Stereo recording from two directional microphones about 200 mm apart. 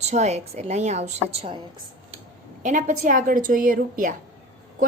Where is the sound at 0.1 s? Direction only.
35° right (ahead or behind).